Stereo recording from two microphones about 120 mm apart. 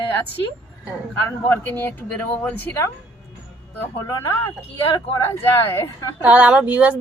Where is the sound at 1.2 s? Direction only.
20° left (ahead or behind).